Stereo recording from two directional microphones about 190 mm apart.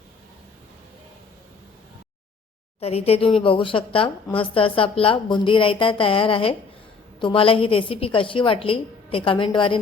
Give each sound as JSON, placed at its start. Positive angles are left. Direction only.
{"t": 2.8, "sound": "a woman's voice", "side_deg": 30}